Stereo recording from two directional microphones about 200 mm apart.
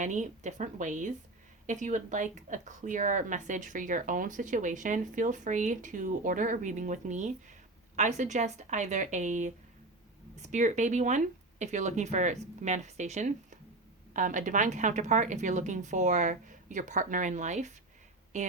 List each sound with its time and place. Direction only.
0.0 s speech: 35° right (ahead or behind)
10.5 s speech: 35° right (ahead or behind)